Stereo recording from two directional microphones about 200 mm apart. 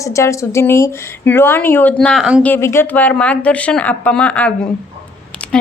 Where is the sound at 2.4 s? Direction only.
10° left (ahead or behind).